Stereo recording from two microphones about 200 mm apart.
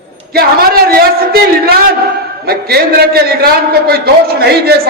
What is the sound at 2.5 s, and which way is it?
A man's voice, 50° right (ahead or behind).